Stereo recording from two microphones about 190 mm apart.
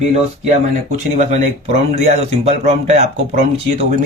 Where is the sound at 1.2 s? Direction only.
40° right (ahead or behind).